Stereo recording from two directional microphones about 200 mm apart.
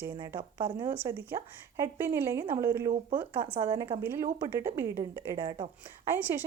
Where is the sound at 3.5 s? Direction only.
25° right (ahead or behind).